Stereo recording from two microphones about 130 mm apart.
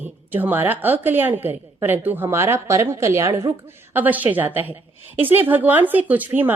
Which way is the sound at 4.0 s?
15° right (ahead or behind).